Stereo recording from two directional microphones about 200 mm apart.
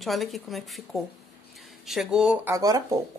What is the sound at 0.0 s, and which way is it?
A woman's voice, centre (ahead or behind).